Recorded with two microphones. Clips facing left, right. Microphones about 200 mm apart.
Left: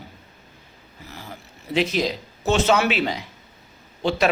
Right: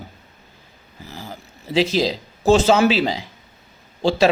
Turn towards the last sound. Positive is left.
turn(degrees=-30)  # may be behind; listen again after turning